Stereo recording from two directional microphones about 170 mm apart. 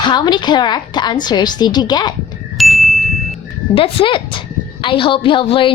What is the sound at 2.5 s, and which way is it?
Ding, centre (ahead or behind).